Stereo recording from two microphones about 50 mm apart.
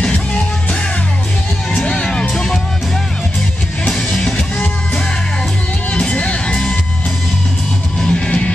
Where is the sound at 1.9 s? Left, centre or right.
Centre.